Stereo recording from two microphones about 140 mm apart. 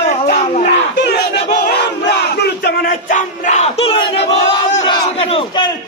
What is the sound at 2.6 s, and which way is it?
Battle cry, 85° left.